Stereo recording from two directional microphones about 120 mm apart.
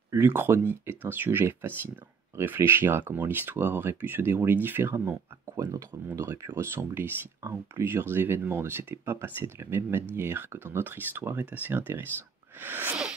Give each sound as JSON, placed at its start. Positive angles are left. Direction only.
{"t": 0.1, "sound": "speech", "side_deg": -20}